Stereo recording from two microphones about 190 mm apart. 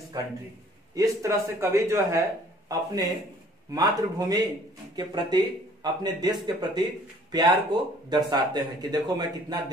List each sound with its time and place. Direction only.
0.9 s a man's voice: 15° right (ahead or behind)